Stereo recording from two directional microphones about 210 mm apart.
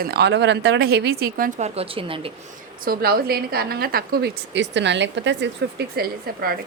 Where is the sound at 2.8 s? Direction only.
45° right (ahead or behind).